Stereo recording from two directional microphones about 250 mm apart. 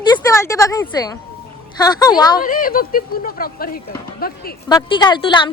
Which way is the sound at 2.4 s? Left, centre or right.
Left.